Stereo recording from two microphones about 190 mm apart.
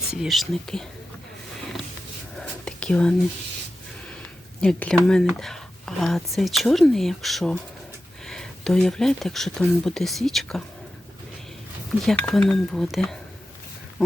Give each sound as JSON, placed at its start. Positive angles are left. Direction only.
{"t": 0.1, "sound": "speech", "side_deg": 0}
{"t": 2.3, "sound": "whispering", "side_deg": 5}
{"t": 4.6, "sound": "speech", "side_deg": 5}
{"t": 12.0, "sound": "speech", "side_deg": 5}